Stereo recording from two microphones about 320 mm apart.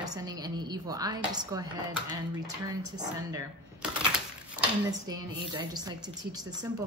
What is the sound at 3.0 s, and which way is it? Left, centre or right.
Speech, centre.